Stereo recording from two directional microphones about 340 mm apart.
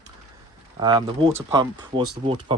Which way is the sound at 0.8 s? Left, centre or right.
Centre.